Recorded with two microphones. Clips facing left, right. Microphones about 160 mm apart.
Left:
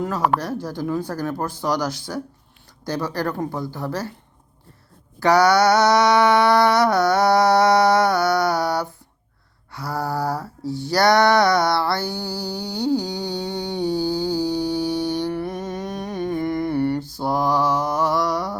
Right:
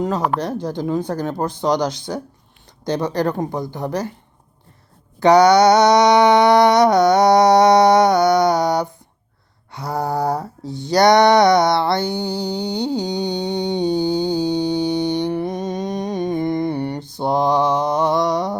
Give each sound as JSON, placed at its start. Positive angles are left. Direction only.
{"t": 0.3, "sound": "speech", "side_deg": -20}
{"t": 5.2, "sound": "mantra", "side_deg": -20}
{"t": 9.7, "sound": "lullaby", "side_deg": -20}